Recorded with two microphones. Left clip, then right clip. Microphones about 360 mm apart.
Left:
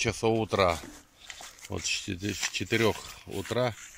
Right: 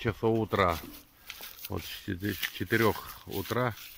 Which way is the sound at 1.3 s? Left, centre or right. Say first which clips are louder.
Left 1 dB; centre.